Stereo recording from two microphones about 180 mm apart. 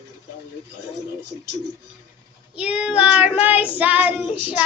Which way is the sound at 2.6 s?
5° right (ahead or behind).